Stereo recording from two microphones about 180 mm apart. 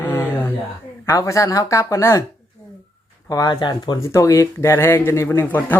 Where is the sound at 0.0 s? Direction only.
10° left (ahead or behind).